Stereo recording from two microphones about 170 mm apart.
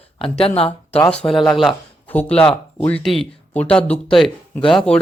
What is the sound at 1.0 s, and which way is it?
Speech, 5° left (ahead or behind).